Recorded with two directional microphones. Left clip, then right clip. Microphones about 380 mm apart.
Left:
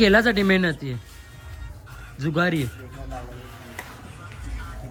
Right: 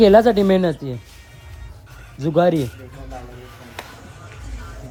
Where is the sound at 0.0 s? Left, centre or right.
Centre.